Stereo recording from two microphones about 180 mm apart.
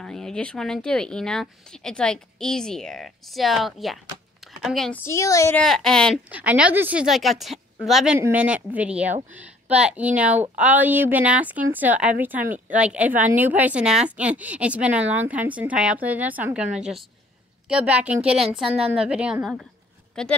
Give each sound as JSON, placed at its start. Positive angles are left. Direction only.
{"t": 0.0, "sound": "a woman's voice", "side_deg": 5}
{"t": 5.0, "sound": "speech", "side_deg": 15}
{"t": 5.6, "sound": "speech", "side_deg": 5}
{"t": 6.3, "sound": "speech", "side_deg": -5}